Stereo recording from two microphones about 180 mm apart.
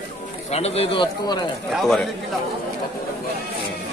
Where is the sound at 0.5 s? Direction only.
35° left (ahead or behind).